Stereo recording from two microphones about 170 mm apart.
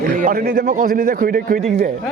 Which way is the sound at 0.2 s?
60° right (ahead or behind).